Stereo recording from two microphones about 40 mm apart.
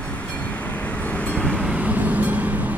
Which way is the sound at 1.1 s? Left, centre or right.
Left.